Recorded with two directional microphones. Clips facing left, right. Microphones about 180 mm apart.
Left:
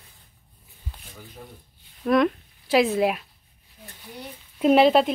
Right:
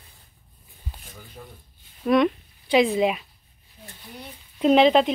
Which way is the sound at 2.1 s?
Centre (ahead or behind).